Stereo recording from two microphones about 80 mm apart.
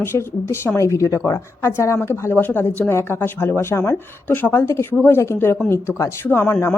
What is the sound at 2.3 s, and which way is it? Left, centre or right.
Speech, left.